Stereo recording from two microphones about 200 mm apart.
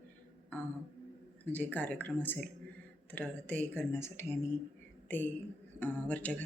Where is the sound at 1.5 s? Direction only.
10° left (ahead or behind).